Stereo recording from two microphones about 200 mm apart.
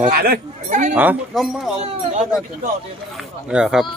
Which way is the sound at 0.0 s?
50° right (ahead or behind).